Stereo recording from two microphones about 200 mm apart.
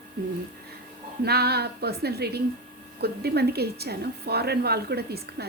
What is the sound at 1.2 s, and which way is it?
A woman's voice, 55° right (ahead or behind).